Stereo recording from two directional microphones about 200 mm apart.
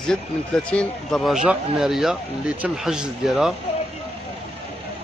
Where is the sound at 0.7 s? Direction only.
5° left (ahead or behind).